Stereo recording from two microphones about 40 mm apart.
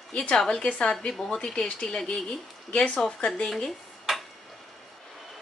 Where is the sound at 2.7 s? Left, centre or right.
Left.